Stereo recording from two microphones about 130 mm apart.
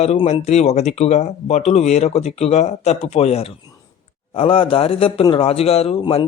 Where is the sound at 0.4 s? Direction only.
55° left (ahead or behind).